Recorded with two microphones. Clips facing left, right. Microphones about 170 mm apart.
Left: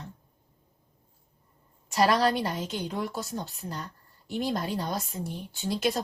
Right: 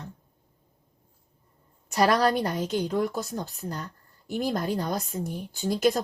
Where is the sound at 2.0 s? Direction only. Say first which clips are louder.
Right 2 dB; 50° right (ahead or behind).